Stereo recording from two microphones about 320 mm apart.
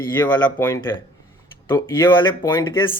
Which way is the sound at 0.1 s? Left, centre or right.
Centre.